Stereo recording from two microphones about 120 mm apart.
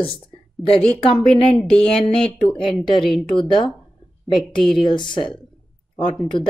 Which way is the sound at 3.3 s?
45° left (ahead or behind).